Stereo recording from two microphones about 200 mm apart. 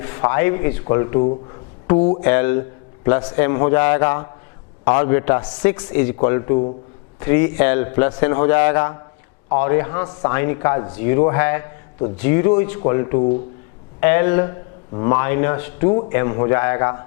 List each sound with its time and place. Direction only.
0.0 s speech: 15° left (ahead or behind)
2.0 s a sound: 35° left (ahead or behind)
2.2 s a man's voice: 15° left (ahead or behind)